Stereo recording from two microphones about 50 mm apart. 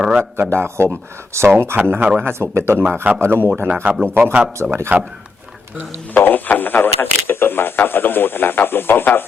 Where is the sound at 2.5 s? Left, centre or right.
Right.